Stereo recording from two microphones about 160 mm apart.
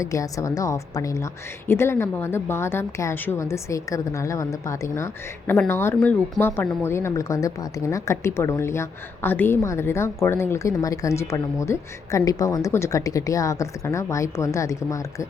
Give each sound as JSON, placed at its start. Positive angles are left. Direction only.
{"t": 0.0, "sound": "a woman's voice", "side_deg": 20}